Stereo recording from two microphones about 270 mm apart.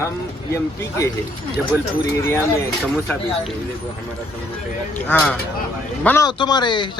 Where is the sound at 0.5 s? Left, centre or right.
Centre.